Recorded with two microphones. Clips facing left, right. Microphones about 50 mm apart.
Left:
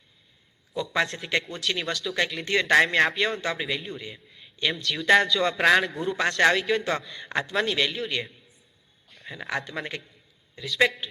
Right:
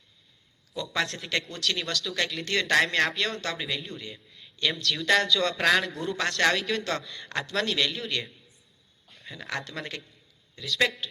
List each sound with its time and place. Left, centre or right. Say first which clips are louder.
0.7 s a man's voice: left 4 dB; centre
0.9 s a man's voice: left 3 dB; centre